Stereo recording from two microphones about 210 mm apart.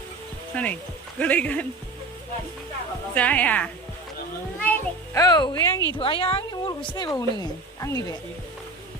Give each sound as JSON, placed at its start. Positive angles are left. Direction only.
{"t": 0.5, "sound": "a woman's voice", "side_deg": 5}
{"t": 3.2, "sound": "a woman's voice", "side_deg": 5}